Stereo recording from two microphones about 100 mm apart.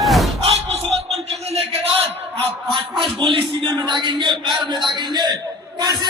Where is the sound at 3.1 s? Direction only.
55° right (ahead or behind).